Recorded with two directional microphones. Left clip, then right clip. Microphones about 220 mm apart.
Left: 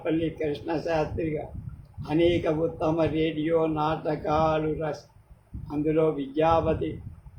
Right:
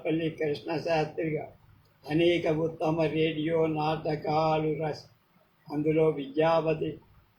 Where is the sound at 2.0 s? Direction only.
15° left (ahead or behind).